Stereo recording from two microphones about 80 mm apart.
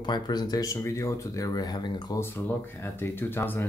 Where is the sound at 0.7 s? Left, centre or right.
Left.